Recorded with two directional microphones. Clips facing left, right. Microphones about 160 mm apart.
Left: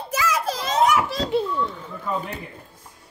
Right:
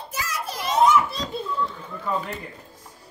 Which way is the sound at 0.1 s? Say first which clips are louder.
Left 8 dB; 90° left.